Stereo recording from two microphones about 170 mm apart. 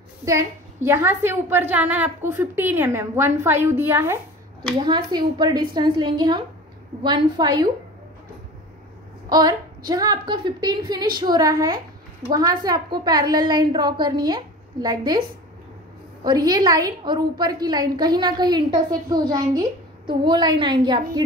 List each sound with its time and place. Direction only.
0.2 s a woman's voice: 20° right (ahead or behind)
4.7 s a woman's voice: 25° right (ahead or behind)
9.3 s a woman's voice: 25° right (ahead or behind)
16.3 s a woman's voice: 25° right (ahead or behind)